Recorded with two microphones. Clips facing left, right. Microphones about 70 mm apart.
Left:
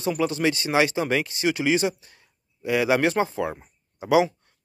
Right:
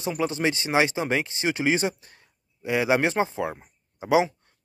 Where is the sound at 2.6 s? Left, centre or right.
Right.